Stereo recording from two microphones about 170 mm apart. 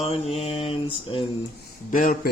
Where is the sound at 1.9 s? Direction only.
50° left (ahead or behind).